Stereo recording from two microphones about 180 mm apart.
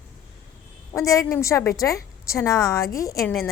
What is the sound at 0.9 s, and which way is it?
A woman's voice, 15° left (ahead or behind).